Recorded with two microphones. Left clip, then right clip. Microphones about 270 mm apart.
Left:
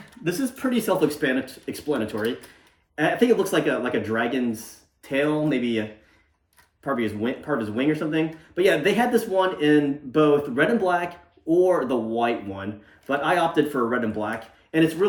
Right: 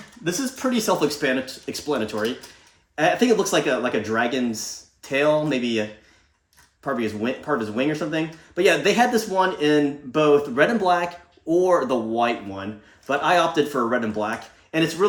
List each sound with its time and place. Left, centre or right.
0.3 s speech: centre
6.8 s speech: centre